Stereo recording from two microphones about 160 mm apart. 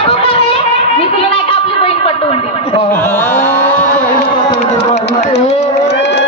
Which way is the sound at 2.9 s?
15° left (ahead or behind).